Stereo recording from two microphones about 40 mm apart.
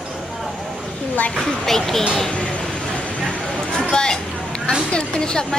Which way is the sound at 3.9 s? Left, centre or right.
Centre.